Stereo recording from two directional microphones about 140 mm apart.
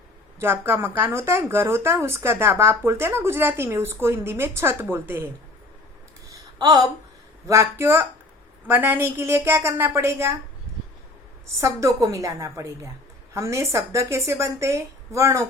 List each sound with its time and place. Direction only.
0.3 s speech: 15° right (ahead or behind)
6.6 s a woman's voice: 30° right (ahead or behind)
11.6 s a woman's voice: 25° right (ahead or behind)